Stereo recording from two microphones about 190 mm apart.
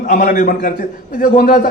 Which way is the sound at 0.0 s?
50° left (ahead or behind).